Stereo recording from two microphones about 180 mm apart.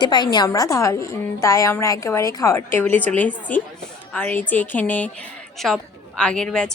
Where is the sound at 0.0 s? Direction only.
25° left (ahead or behind).